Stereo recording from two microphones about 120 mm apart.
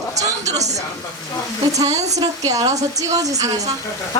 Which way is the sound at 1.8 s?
30° right (ahead or behind).